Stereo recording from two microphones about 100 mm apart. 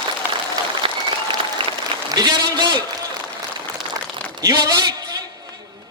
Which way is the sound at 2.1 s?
45° right (ahead or behind).